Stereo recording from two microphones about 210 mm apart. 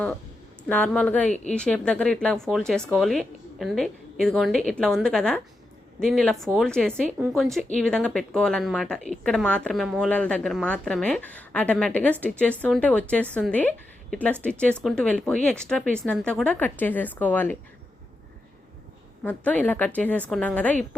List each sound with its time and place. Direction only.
0.7 s a woman's voice: 5° left (ahead or behind)
19.2 s a woman's voice: 5° left (ahead or behind)